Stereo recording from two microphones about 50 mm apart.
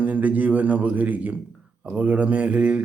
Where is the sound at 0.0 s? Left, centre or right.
Right.